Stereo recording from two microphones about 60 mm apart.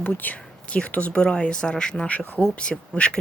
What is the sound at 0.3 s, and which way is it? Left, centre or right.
Speech, centre.